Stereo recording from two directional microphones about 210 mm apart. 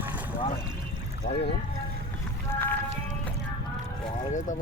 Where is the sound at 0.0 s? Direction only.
10° right (ahead or behind).